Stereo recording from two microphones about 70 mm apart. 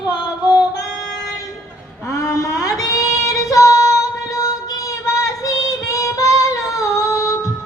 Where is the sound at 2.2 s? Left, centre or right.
Left.